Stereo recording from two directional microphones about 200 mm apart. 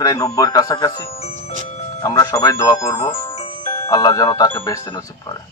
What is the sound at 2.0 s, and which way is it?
A man's voice, 15° left (ahead or behind).